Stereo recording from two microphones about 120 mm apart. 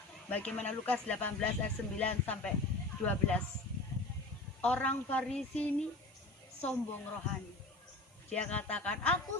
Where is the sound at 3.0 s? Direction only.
10° left (ahead or behind).